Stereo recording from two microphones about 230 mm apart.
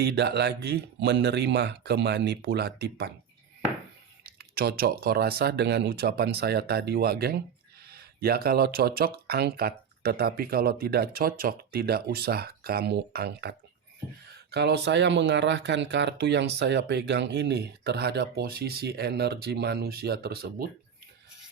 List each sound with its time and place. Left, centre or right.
0.0 s speech: right
4.2 s speech: right